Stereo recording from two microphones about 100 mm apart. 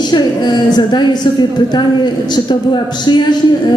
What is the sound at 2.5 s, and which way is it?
Speech, 50° left (ahead or behind).